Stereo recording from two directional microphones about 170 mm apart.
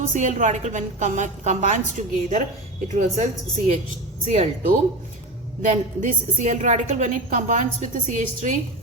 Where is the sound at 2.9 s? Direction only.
45° right (ahead or behind).